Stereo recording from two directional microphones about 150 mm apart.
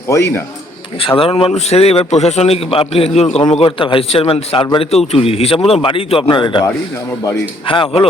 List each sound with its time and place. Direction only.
0.1 s a man's voice: 20° left (ahead or behind)
0.9 s a man's voice: 35° left (ahead or behind)
7.7 s a man's voice: 35° left (ahead or behind)